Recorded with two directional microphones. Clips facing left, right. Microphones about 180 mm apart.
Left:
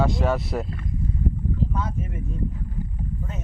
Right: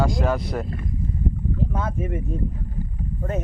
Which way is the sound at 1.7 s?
55° right (ahead or behind).